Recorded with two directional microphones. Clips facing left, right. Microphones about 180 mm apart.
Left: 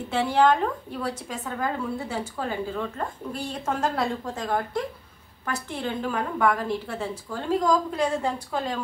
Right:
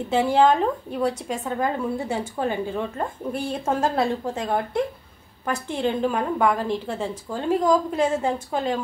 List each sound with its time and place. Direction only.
0.1 s a woman's voice: 25° right (ahead or behind)